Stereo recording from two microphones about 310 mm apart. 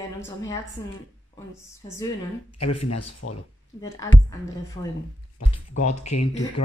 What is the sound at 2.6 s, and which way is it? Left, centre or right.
Speech, left.